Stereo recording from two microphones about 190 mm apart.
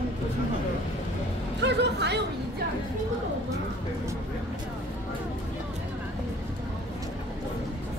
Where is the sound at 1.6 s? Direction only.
65° right (ahead or behind).